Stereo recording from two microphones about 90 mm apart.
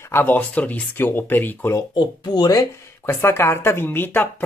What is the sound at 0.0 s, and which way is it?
Speech, 25° left (ahead or behind).